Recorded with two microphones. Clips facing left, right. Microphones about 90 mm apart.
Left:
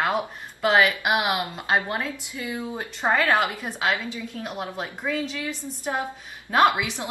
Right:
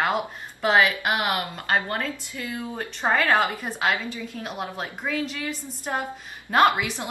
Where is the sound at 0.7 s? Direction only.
15° left (ahead or behind).